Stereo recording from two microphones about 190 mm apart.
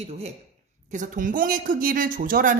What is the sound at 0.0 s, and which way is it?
Speech, 35° right (ahead or behind).